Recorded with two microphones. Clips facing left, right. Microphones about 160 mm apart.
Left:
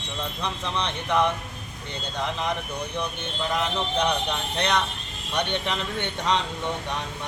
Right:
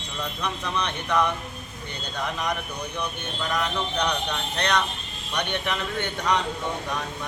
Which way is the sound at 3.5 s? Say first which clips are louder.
Left 1 dB; 25° left (ahead or behind).